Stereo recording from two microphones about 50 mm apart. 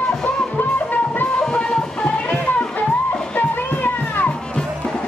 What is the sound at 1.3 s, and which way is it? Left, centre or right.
Music, centre.